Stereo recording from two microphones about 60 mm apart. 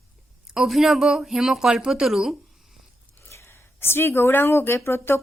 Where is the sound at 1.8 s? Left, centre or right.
Centre.